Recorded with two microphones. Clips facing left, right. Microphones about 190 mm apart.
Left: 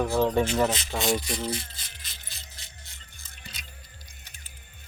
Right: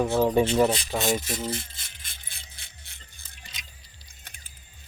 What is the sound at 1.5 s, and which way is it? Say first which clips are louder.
Music: even; 50° right (ahead or behind).